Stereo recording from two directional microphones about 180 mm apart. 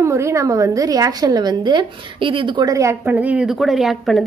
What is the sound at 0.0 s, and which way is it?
A woman's voice, 15° right (ahead or behind).